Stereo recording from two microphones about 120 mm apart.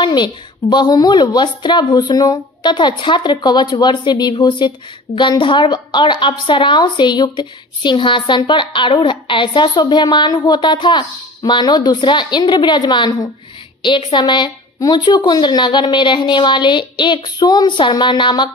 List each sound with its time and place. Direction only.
0.0 s a woman's voice: 40° left (ahead or behind)